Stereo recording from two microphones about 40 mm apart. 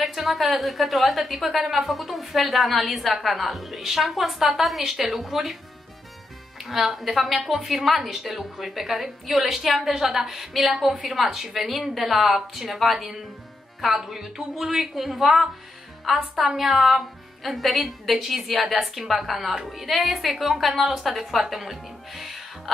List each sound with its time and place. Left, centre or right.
0.0 s a woman's voice: centre
6.6 s a woman's voice: centre